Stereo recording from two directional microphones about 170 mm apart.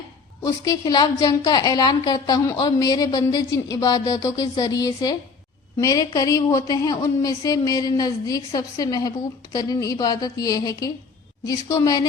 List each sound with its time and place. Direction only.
0.4 s speech: 20° left (ahead or behind)